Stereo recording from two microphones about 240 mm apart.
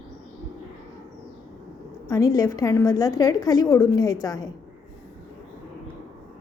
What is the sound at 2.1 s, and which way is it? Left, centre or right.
A woman's voice, centre.